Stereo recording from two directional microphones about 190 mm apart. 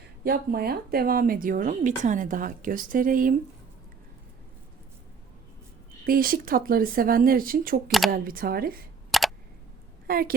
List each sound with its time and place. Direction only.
0.3 s speech: 55° right (ahead or behind)
6.1 s speech: 50° right (ahead or behind)
7.9 s speech: centre (ahead or behind)
8.1 s speech: 50° right (ahead or behind)
9.1 s a sound: centre (ahead or behind)
10.1 s a woman's voice: 50° right (ahead or behind)